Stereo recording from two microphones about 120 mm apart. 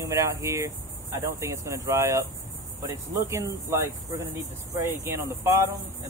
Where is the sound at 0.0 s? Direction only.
25° right (ahead or behind).